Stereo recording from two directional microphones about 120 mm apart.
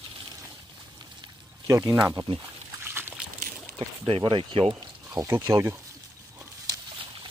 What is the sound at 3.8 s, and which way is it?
Speech, 45° right (ahead or behind).